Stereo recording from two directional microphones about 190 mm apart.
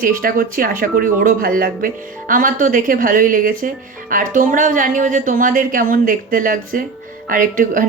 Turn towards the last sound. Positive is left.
turn(degrees=-45)  # may be behind; listen again after turning